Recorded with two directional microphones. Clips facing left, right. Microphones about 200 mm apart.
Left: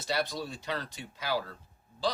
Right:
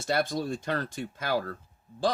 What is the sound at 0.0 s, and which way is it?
Speech, 50° right (ahead or behind).